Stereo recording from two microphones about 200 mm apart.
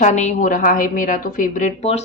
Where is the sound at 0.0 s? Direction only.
35° left (ahead or behind).